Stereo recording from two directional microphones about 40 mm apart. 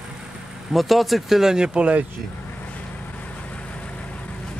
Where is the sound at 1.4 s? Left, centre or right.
Centre.